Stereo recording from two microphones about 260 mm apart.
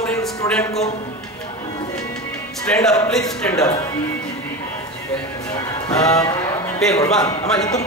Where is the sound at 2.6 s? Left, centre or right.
Centre.